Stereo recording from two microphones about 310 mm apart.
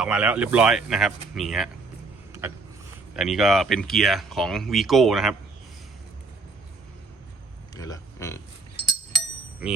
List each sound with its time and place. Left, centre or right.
0.0 s speech: centre
3.2 s speech: centre
7.8 s speech: centre